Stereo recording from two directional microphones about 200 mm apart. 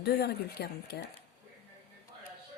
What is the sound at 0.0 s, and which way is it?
Speech, 55° left (ahead or behind).